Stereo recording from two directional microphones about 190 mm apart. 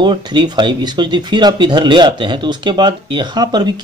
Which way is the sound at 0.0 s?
25° right (ahead or behind).